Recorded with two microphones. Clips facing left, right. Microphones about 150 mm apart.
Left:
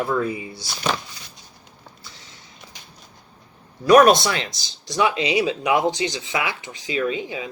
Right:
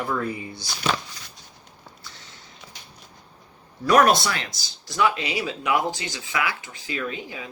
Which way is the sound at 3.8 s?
20° left (ahead or behind).